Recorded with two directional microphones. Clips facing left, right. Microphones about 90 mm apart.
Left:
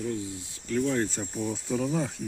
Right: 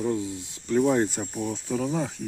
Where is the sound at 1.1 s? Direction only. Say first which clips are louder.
Right 1 dB; 5° right (ahead or behind).